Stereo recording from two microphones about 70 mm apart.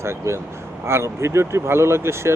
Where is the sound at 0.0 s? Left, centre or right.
Right.